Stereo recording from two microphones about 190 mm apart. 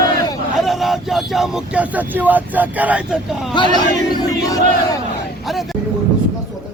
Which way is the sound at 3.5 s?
25° left (ahead or behind).